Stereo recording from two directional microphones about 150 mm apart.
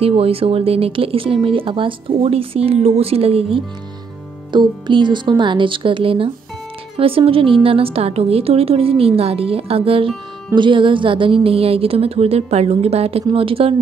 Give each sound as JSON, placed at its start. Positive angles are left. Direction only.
{"t": 0.0, "sound": "a woman's voice", "side_deg": -40}